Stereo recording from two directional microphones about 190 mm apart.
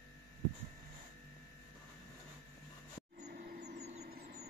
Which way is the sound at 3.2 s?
50° right (ahead or behind).